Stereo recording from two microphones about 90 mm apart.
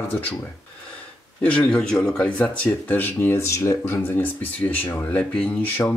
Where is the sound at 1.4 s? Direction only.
15° left (ahead or behind).